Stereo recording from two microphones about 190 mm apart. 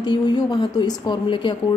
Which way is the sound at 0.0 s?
25° left (ahead or behind).